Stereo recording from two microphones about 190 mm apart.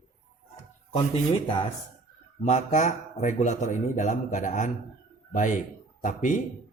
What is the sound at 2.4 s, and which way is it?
A man's voice, 40° left (ahead or behind).